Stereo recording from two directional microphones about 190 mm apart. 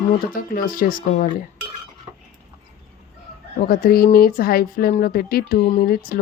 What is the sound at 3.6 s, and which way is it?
Speech, 50° left (ahead or behind).